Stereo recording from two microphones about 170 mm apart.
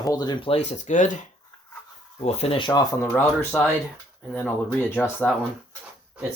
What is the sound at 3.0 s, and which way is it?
Speech, 10° left (ahead or behind).